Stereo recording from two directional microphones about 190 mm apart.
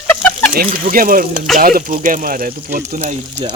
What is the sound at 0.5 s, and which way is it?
Speech, 45° right (ahead or behind).